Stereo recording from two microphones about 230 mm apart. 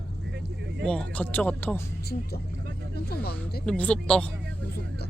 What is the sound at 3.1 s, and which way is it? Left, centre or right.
Speech, left.